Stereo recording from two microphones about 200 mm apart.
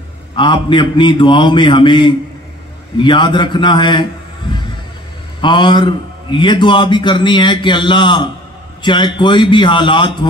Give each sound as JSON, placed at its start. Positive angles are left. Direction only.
{"t": 0.4, "sound": "a man's voice", "side_deg": 25}